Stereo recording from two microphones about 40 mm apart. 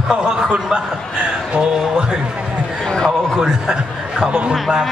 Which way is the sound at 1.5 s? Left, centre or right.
Centre.